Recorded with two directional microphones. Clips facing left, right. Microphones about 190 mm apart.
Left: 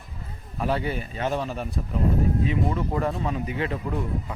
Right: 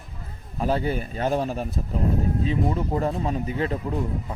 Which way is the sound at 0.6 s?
35° right (ahead or behind).